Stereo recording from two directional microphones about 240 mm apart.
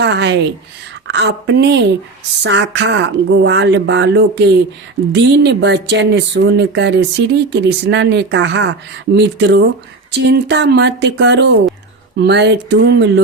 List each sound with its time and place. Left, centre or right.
0.0 s a woman's voice: right